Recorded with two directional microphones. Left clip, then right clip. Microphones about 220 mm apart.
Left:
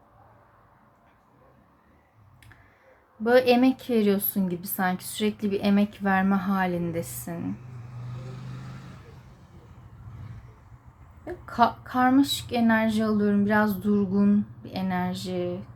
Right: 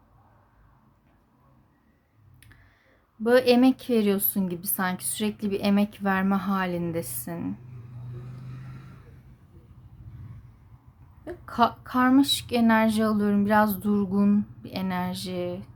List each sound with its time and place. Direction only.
3.2 s speech: 10° right (ahead or behind)
11.3 s speech: 15° right (ahead or behind)